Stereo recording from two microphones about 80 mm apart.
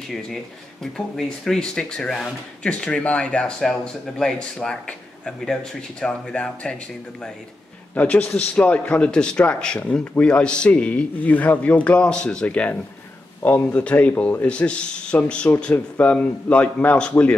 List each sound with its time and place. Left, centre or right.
0.9 s speech: centre
7.9 s a man's voice: centre